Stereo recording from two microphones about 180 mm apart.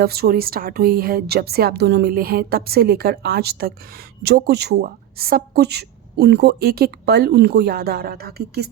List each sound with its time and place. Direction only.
0.0 s speech: 60° right (ahead or behind)